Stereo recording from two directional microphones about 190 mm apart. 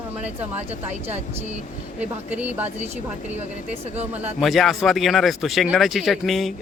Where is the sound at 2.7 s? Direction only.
35° right (ahead or behind).